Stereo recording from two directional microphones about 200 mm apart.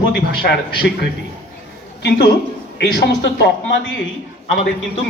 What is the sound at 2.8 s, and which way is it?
Speech, 55° left (ahead or behind).